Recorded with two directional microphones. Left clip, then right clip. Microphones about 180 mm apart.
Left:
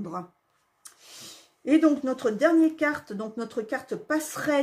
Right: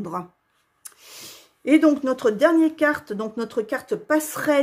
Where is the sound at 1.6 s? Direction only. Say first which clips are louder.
Right 4 dB; 45° right (ahead or behind).